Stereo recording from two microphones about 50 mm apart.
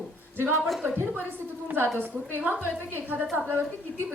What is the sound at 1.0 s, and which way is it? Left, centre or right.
A woman's voice, right.